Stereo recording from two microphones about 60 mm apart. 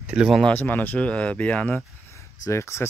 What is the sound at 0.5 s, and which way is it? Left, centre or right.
Speech, left.